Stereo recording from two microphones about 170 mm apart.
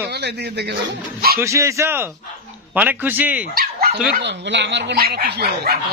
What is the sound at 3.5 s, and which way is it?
Speech, 65° right (ahead or behind).